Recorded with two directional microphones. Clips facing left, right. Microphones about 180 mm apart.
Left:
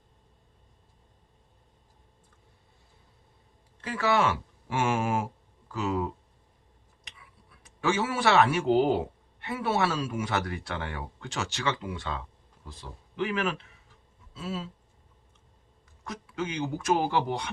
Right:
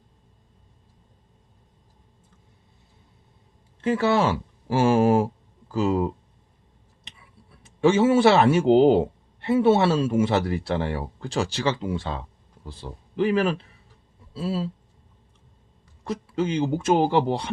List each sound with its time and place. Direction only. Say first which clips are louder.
3.8 s speech: right 5 dB; 25° right (ahead or behind)
7.6 s a man's voice: right 9 dB; 30° right (ahead or behind)
16.0 s speech: right 8 dB; 30° right (ahead or behind)